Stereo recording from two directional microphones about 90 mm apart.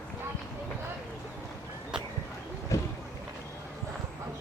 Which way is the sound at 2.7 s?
35° left (ahead or behind).